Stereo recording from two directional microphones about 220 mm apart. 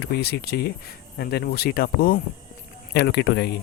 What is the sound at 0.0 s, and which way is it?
Speech, 45° left (ahead or behind).